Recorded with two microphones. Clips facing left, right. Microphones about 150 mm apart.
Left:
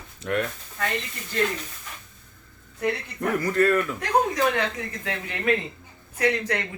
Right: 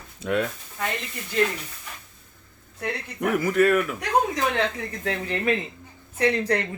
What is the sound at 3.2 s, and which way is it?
Speech, 10° right (ahead or behind).